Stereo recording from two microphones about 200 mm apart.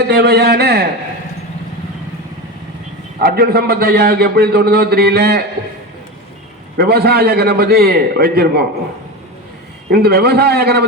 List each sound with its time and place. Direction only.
0.1 s a man's voice: 55° right (ahead or behind)
3.2 s a man's voice: 50° right (ahead or behind)
6.7 s a man's voice: 55° right (ahead or behind)
9.9 s a man's voice: 50° right (ahead or behind)